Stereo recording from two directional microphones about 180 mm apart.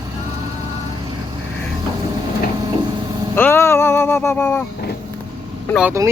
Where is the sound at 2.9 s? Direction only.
25° right (ahead or behind).